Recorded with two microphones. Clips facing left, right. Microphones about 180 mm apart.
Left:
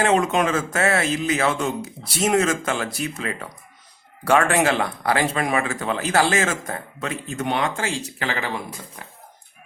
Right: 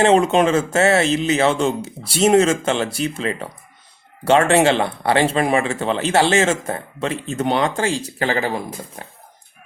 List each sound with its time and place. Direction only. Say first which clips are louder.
0.0 s speech: right 5 dB; 30° right (ahead or behind)